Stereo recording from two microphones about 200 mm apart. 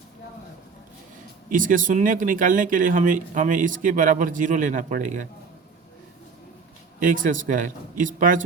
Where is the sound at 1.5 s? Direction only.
40° right (ahead or behind).